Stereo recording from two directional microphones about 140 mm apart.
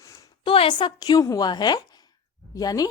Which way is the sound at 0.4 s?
40° left (ahead or behind).